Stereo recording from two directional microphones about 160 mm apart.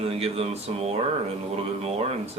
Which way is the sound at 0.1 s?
40° right (ahead or behind).